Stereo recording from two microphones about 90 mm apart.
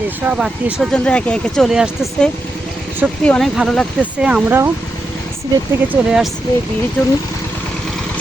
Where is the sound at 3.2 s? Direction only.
5° left (ahead or behind).